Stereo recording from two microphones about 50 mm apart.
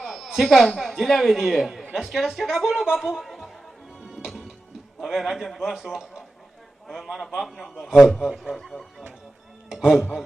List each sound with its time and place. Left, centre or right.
0.0 s a man's voice: centre
4.2 s music: centre
4.9 s a man's voice: centre
8.2 s a man's voice: centre
8.5 s speech: centre
9.8 s a man's voice: centre